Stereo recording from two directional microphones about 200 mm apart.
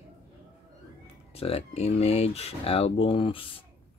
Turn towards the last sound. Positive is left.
turn(degrees=25)  # may be behind; listen again after turning